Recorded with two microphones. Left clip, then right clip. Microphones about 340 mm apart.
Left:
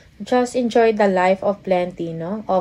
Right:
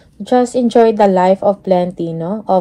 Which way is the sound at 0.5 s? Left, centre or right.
Right.